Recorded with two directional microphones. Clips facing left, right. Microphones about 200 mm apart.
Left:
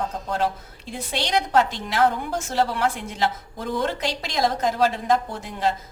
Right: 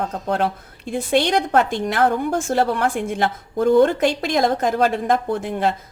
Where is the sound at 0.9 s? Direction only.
55° right (ahead or behind).